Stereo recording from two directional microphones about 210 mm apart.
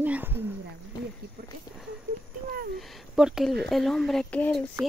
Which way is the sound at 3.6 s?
Centre (ahead or behind).